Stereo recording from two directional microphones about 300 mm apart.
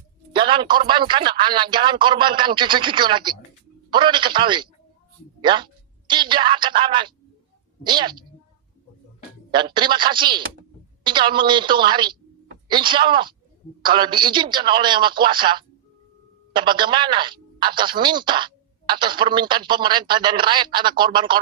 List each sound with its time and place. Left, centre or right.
0.3 s speech: centre
9.6 s speech: centre